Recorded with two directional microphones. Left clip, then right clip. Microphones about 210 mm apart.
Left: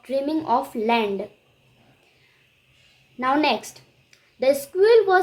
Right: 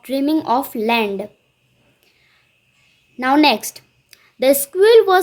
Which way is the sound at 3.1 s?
35° right (ahead or behind).